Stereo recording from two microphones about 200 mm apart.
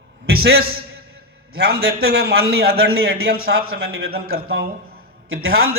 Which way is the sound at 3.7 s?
90° right.